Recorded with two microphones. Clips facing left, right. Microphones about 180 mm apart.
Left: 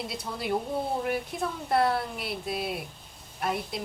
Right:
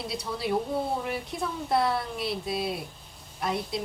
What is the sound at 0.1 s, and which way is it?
Speech, centre (ahead or behind).